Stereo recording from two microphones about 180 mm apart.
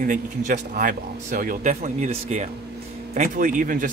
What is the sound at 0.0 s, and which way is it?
Speech, 50° right (ahead or behind).